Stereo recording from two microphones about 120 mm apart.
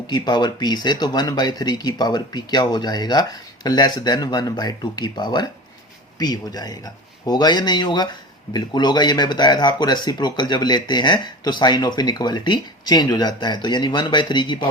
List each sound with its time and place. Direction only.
0.1 s speech: 35° left (ahead or behind)